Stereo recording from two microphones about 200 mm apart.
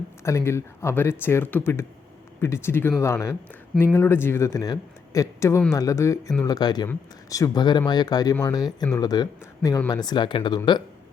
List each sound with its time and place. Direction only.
0.3 s a man's voice: 15° left (ahead or behind)